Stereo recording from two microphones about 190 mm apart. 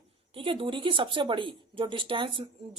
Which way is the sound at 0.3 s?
25° right (ahead or behind).